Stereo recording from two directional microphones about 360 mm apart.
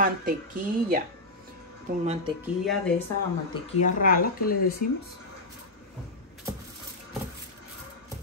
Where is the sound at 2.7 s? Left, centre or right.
Centre.